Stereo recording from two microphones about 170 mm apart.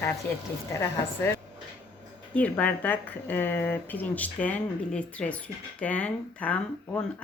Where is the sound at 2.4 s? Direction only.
10° left (ahead or behind).